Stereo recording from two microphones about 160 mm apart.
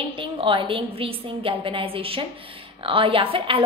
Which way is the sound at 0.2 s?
35° right (ahead or behind).